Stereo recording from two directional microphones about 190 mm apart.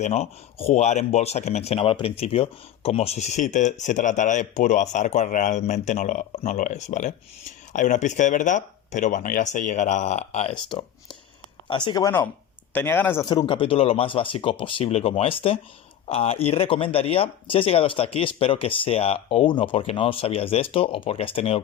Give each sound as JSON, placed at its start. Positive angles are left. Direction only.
{"t": 0.0, "sound": "speech", "side_deg": 35}
{"t": 10.7, "sound": "speech", "side_deg": 25}